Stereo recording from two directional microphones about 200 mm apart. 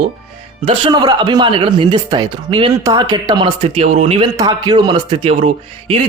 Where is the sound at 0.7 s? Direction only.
25° right (ahead or behind).